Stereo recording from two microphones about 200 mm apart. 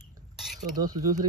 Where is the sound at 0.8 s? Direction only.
20° right (ahead or behind).